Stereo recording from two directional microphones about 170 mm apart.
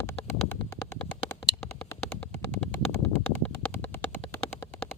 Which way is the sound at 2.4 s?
10° left (ahead or behind).